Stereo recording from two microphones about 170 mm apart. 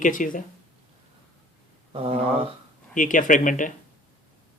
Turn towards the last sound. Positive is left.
turn(degrees=50)  # may be behind; listen again after turning